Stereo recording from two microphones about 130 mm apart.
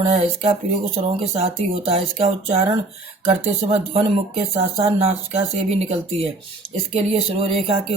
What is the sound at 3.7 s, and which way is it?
Speech, 50° right (ahead or behind).